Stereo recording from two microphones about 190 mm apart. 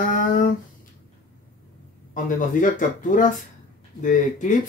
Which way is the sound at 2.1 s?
45° left (ahead or behind).